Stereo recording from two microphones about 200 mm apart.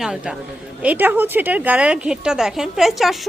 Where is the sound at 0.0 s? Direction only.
5° right (ahead or behind).